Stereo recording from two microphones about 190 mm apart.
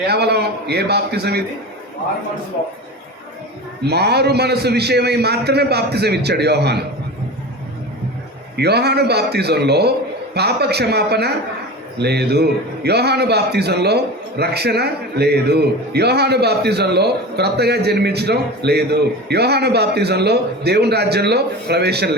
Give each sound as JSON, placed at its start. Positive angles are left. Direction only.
{"t": 0.0, "sound": "a man's voice", "side_deg": -60}
{"t": 3.8, "sound": "a man's voice", "side_deg": -60}
{"t": 8.5, "sound": "a man's voice", "side_deg": -60}